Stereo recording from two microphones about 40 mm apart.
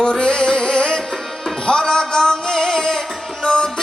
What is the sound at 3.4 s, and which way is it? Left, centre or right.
Music, left.